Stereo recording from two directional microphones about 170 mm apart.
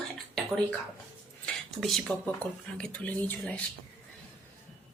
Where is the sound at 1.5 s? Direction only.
5° left (ahead or behind).